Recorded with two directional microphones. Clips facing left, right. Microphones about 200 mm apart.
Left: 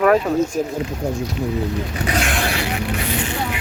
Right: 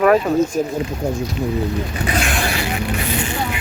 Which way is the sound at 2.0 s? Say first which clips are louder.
Even; 65° left (ahead or behind).